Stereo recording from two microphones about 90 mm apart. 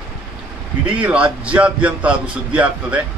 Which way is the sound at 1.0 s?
15° right (ahead or behind).